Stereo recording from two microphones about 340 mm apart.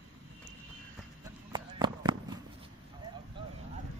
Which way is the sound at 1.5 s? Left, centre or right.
Centre.